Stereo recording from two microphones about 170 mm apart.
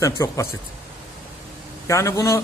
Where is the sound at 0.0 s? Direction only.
20° left (ahead or behind).